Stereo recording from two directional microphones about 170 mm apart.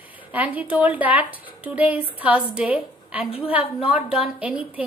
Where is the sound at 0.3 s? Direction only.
10° right (ahead or behind).